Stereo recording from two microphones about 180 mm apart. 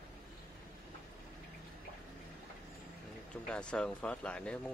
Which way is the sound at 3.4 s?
5° left (ahead or behind).